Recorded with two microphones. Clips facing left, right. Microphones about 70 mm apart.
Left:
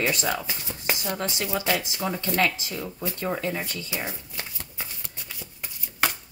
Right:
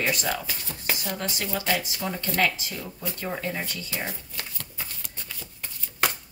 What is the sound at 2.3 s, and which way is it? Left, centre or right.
Speech, left.